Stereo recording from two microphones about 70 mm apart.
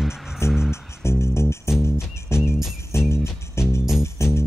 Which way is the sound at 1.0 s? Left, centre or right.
Left.